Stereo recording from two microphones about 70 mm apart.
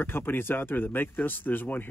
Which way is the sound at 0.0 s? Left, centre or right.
Left.